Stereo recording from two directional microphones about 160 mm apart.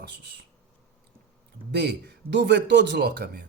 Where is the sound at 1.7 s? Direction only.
90° right.